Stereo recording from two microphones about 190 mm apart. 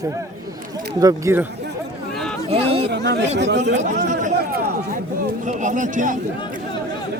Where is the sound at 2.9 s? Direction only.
65° right (ahead or behind).